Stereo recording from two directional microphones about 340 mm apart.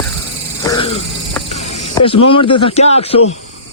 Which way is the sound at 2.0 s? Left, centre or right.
Centre.